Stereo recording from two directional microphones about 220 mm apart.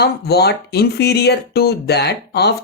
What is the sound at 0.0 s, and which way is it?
Speech, 50° left (ahead or behind).